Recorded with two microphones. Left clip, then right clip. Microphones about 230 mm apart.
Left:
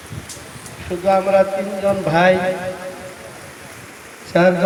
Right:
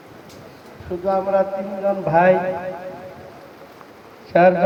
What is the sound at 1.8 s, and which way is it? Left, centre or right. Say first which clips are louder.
Speech: left 1 dB; left.